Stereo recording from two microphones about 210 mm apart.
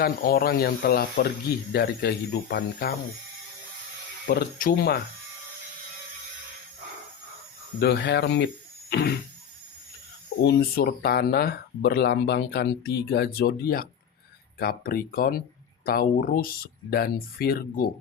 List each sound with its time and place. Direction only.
0.0 s speech: 45° left (ahead or behind)
4.3 s speech: 45° left (ahead or behind)
7.8 s speech: 55° left (ahead or behind)
8.9 s a sound: 50° left (ahead or behind)
10.4 s speech: 45° left (ahead or behind)